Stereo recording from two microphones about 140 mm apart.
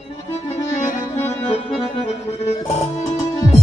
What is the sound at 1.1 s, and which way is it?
Accordion, 15° left (ahead or behind).